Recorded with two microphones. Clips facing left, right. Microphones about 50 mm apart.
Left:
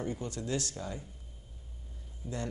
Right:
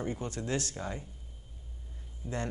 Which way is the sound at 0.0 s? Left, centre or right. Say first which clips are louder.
Right 1 dB; right.